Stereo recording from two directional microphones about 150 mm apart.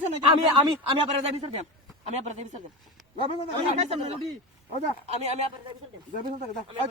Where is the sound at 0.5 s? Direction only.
40° right (ahead or behind).